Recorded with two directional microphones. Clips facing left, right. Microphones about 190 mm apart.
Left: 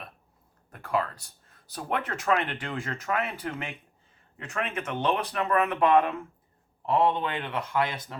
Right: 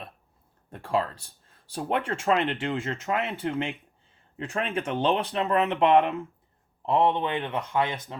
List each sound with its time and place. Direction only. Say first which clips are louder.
0.7 s speech: right 2 dB; 30° right (ahead or behind)